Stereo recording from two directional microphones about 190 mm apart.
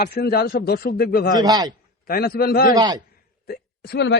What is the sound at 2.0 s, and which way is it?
Speech, 50° left (ahead or behind).